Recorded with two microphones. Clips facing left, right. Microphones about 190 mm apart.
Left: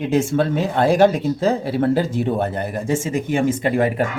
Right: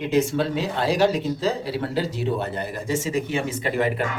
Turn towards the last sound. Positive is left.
turn(degrees=50)  # may be behind; listen again after turning